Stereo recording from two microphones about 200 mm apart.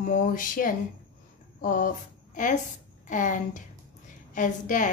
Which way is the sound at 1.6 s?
45° left (ahead or behind).